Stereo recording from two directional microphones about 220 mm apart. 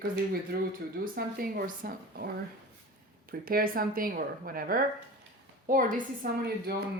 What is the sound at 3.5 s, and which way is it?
Speech, 40° right (ahead or behind).